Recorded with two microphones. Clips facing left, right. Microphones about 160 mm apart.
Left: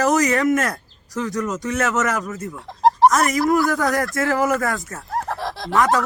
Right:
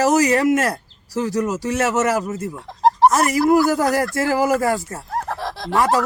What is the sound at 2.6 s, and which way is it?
Chicken, centre (ahead or behind).